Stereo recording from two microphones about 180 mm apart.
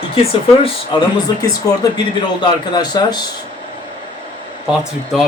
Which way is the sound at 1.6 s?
20° left (ahead or behind).